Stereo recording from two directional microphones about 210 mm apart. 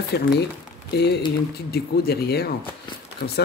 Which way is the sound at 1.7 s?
50° left (ahead or behind).